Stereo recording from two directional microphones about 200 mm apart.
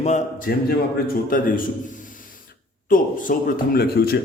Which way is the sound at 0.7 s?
50° left (ahead or behind).